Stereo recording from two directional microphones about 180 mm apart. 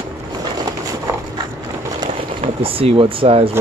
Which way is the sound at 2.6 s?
30° right (ahead or behind).